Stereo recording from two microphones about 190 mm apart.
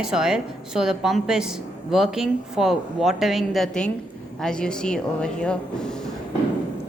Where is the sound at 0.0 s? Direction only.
5° right (ahead or behind).